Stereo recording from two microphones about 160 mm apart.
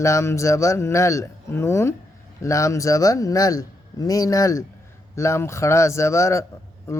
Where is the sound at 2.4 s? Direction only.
20° left (ahead or behind).